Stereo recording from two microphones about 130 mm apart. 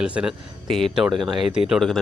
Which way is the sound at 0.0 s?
5° right (ahead or behind).